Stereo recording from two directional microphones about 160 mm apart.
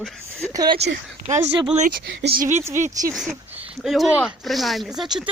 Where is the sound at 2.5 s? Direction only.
15° right (ahead or behind).